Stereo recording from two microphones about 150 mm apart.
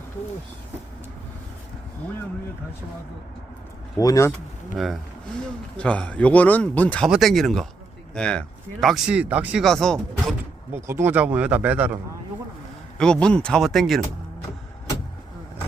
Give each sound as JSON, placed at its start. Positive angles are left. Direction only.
{"t": 3.9, "sound": "speech", "side_deg": 20}
{"t": 5.7, "sound": "speech", "side_deg": 5}
{"t": 10.8, "sound": "speech", "side_deg": -15}
{"t": 13.0, "sound": "speech", "side_deg": 5}